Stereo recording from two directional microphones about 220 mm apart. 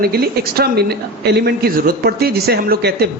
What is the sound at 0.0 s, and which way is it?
A man's voice, 45° right (ahead or behind).